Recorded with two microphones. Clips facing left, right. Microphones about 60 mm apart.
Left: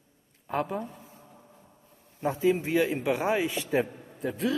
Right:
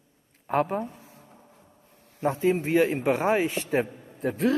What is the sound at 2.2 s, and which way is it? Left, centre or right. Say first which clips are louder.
Speech: right 3 dB; right.